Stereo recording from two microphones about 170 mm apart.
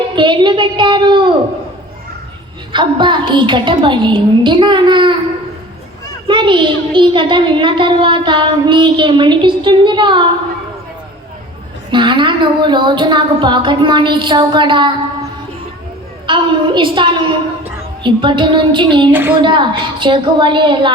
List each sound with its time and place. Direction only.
0.2 s a child's voice: 25° right (ahead or behind)
2.7 s a child's voice: 25° right (ahead or behind)
6.2 s a child's voice: 30° right (ahead or behind)
11.9 s a child's voice: 25° right (ahead or behind)